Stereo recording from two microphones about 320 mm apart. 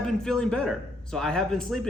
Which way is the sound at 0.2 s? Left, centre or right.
Centre.